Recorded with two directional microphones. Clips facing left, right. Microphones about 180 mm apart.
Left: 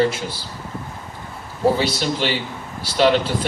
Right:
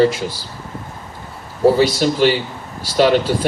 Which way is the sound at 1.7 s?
45° right (ahead or behind).